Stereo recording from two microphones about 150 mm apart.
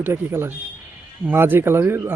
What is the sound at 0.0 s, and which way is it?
Speech, 15° right (ahead or behind).